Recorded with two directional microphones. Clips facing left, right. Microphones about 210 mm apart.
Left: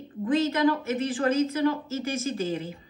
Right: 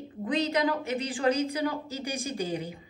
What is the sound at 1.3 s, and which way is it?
A woman's voice, 15° right (ahead or behind).